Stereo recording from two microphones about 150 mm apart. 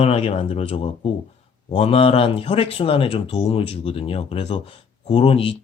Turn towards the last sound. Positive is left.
turn(degrees=40)  # may be behind; listen again after turning